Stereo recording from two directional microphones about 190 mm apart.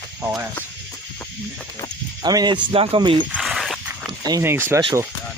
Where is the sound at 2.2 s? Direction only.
20° right (ahead or behind).